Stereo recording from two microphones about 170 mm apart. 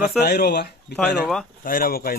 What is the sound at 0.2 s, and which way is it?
Speech, 70° left (ahead or behind).